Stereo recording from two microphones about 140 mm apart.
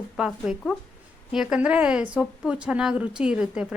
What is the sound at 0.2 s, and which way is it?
A woman's voice, 5° right (ahead or behind).